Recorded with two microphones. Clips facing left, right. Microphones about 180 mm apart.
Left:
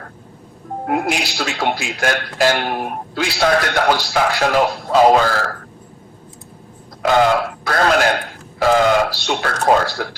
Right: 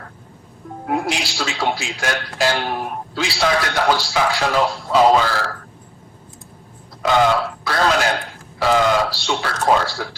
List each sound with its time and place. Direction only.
0.9 s a man's voice: 55° left (ahead or behind)
7.1 s speech: 50° left (ahead or behind)